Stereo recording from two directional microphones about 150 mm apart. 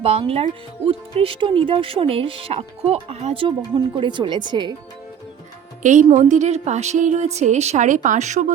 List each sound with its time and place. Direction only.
0.0 s speech: 40° right (ahead or behind)
5.8 s a woman's voice: 55° right (ahead or behind)